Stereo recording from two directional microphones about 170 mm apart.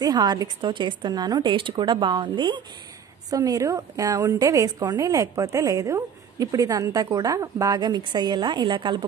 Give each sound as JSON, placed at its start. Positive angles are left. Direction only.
{"t": 0.0, "sound": "a woman's voice", "side_deg": -25}